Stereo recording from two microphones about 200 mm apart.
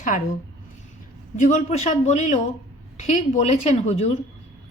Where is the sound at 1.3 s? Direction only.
40° left (ahead or behind).